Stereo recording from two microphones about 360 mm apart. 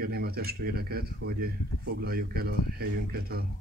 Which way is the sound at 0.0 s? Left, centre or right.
Right.